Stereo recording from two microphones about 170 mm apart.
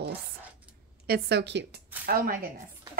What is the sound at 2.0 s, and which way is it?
Speech, 55° right (ahead or behind).